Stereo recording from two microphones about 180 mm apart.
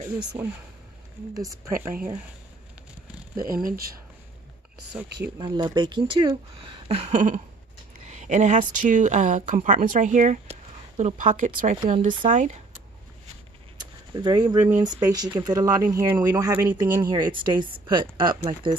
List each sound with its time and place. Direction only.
0.3 s speech: 15° right (ahead or behind)
3.4 s speech: 55° right (ahead or behind)
4.9 s speech: 5° right (ahead or behind)
5.4 s speech: 25° right (ahead or behind); by 12.5 s 45° right (ahead or behind)
13.7 s a sound: 25° right (ahead or behind)
15.1 s speech: 20° right (ahead or behind)